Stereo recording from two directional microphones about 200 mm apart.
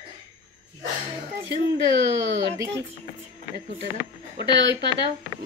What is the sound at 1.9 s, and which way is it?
Speech, 60° right (ahead or behind).